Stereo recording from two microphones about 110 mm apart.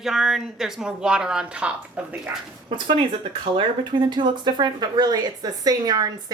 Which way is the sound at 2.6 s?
45° right (ahead or behind).